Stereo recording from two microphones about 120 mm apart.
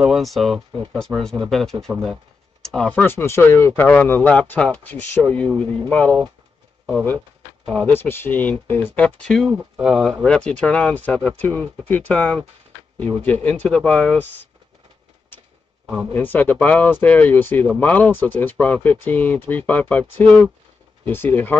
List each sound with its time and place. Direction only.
0.0 s speech: centre (ahead or behind)
7.7 s speech: 15° left (ahead or behind)
9.8 s speech: 5° right (ahead or behind); by 14.5 s 15° left (ahead or behind)
16.1 s speech: 15° left (ahead or behind)